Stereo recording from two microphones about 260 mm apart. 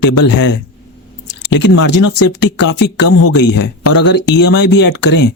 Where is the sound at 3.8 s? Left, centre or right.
Left.